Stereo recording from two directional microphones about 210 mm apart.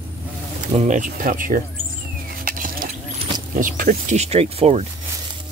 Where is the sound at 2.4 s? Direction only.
40° right (ahead or behind).